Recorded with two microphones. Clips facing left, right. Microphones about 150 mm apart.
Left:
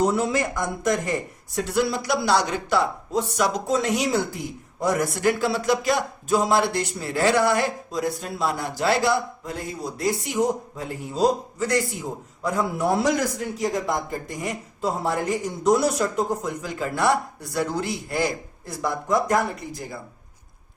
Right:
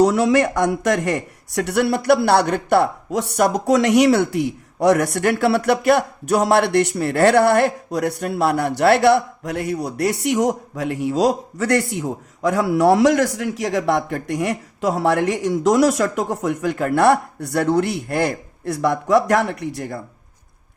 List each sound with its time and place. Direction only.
0.0 s a man's voice: 85° right; by 3.8 s 55° right (ahead or behind)
3.8 s a man's voice: 70° right (ahead or behind)